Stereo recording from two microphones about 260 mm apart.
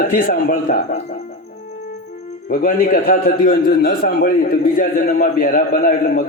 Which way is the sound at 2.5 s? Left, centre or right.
Left.